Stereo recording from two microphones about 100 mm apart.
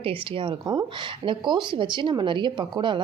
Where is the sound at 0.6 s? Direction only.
50° right (ahead or behind).